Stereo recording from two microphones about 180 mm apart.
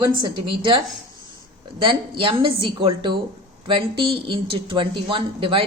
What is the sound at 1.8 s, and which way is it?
A woman's voice, 30° right (ahead or behind).